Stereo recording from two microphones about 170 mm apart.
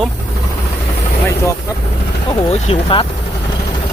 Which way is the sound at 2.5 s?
35° left (ahead or behind).